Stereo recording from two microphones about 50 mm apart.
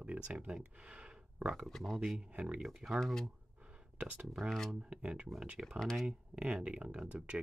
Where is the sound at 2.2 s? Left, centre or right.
Right.